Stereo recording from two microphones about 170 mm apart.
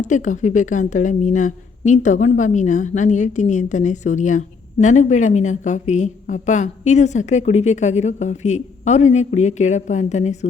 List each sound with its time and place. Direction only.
0.0 s a woman's voice: 45° left (ahead or behind)